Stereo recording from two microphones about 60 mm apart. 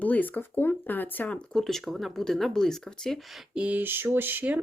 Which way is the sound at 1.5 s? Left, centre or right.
Centre.